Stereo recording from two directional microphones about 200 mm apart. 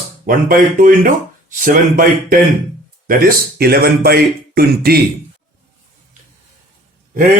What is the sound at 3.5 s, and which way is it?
Speech, 50° right (ahead or behind).